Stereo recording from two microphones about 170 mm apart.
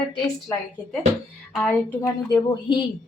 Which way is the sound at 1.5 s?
5° left (ahead or behind).